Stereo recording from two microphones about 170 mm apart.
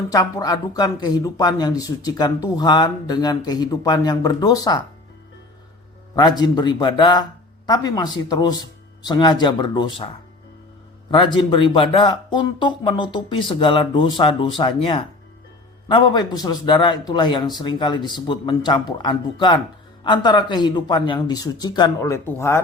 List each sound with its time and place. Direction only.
0.1 s speech: 20° left (ahead or behind)
6.1 s speech: 25° left (ahead or behind)
11.1 s speech: 30° left (ahead or behind)